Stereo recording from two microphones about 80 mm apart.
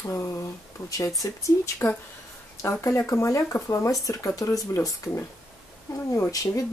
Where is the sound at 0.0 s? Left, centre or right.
Left.